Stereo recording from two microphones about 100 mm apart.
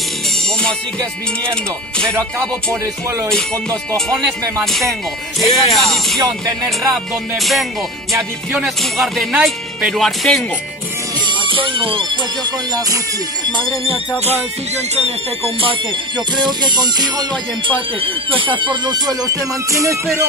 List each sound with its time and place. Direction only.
2.1 s music: 30° right (ahead or behind)
5.4 s speech: centre (ahead or behind)
6.2 s music: 40° right (ahead or behind)
6.8 s speech: centre (ahead or behind)
11.2 s music: 55° right (ahead or behind)
13.5 s music: 55° right (ahead or behind)
15.0 s speech: 80° right
16.3 s music: 45° right (ahead or behind)
18.0 s music: 60° right (ahead or behind); by 20.0 s 30° right (ahead or behind)